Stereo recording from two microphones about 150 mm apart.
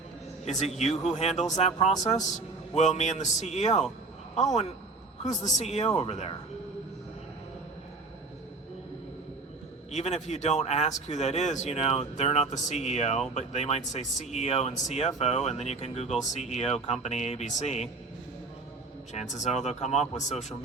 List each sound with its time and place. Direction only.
0.4 s speech: 50° left (ahead or behind)
9.9 s speech: 50° left (ahead or behind)
19.1 s speech: 50° left (ahead or behind)